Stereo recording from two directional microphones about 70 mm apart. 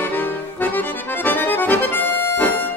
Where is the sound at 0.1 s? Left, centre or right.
Left.